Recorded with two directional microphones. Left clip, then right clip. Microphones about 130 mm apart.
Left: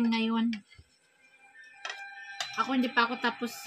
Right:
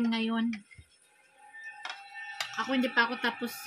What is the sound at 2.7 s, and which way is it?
Speech, 30° left (ahead or behind).